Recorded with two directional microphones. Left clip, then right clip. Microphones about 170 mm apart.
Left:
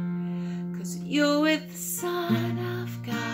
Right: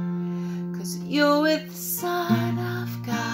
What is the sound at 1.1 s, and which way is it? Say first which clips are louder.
Music: right 3 dB; 10° right (ahead or behind).